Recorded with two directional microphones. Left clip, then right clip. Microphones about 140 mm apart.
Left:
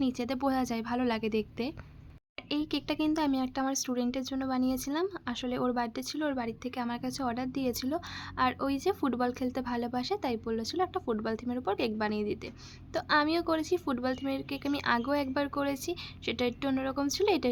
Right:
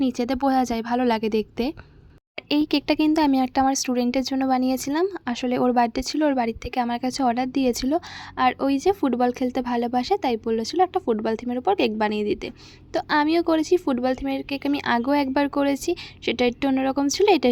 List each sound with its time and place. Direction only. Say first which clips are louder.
0.0 s speech: right 8 dB; 45° right (ahead or behind)